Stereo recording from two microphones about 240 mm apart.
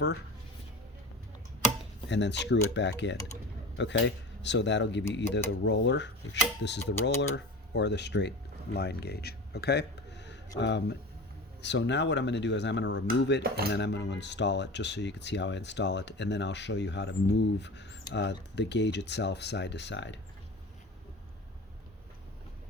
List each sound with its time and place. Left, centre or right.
2.0 s speech: left